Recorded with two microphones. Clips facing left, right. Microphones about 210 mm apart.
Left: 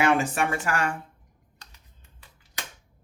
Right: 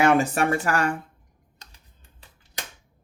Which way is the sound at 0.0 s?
40° right (ahead or behind).